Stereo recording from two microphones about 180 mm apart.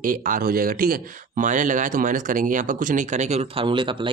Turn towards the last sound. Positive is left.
turn(degrees=-30)  # may be behind; listen again after turning